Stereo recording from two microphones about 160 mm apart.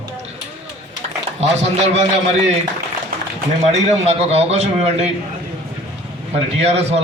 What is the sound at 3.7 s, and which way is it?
A man's voice, 40° right (ahead or behind).